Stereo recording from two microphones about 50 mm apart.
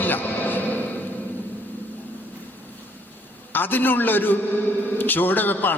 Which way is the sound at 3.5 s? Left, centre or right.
Left.